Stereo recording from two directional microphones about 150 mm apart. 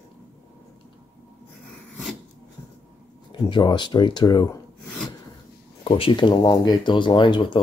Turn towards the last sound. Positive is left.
turn(degrees=30)  # may be behind; listen again after turning